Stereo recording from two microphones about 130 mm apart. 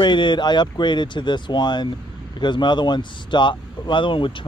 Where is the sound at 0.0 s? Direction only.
35° left (ahead or behind).